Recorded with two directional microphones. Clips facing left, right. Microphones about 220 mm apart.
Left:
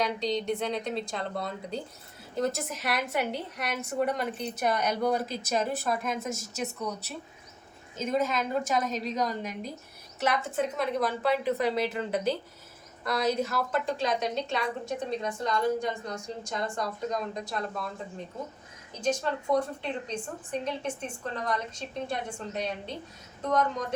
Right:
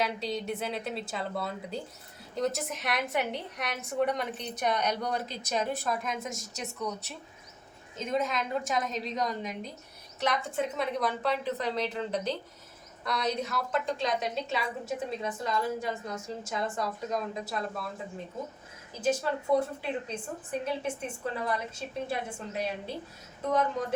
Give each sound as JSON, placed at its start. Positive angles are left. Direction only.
{"t": 0.0, "sound": "a woman's voice", "side_deg": -5}
{"t": 18.9, "sound": "speech", "side_deg": -5}